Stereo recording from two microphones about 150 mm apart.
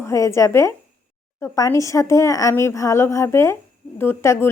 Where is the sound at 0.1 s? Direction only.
20° left (ahead or behind).